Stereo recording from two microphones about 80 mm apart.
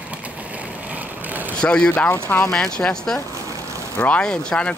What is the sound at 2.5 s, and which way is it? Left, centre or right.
Speech, centre.